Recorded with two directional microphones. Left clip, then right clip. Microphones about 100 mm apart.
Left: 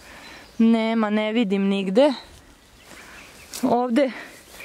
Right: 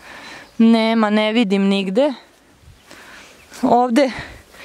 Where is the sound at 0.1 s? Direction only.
35° right (ahead or behind).